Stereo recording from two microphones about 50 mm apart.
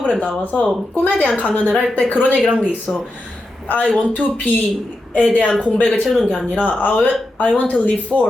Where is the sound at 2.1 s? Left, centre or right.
Right.